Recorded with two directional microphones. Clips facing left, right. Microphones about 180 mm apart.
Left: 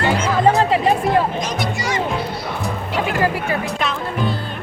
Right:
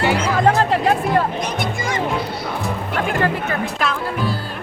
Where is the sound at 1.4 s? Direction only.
55° right (ahead or behind).